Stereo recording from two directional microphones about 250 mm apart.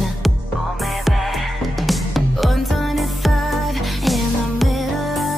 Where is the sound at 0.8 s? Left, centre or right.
Centre.